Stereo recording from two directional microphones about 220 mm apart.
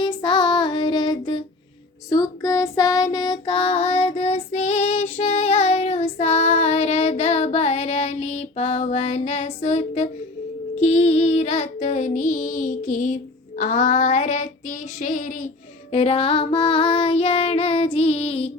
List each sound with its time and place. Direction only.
0.0 s child singing: 20° left (ahead or behind)
2.0 s female singing: 15° left (ahead or behind)
10.8 s child singing: 30° left (ahead or behind)
15.9 s child singing: 25° left (ahead or behind)